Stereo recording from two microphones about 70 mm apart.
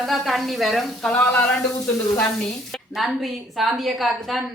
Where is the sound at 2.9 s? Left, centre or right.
Centre.